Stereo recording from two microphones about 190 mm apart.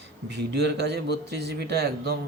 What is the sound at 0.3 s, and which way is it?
A man's voice, 60° right (ahead or behind).